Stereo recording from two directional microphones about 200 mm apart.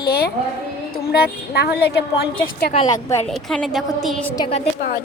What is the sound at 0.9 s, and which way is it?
Speech, 50° left (ahead or behind).